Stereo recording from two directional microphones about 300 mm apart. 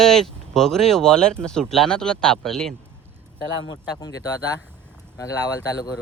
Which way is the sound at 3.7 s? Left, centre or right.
Centre.